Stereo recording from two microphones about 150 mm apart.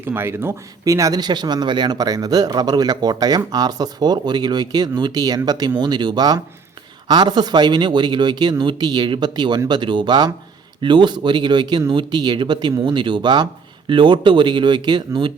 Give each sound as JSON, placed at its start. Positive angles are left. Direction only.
{"t": 0.0, "sound": "speech", "side_deg": -15}